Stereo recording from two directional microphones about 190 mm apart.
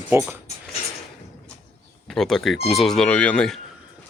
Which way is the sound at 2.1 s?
5° left (ahead or behind).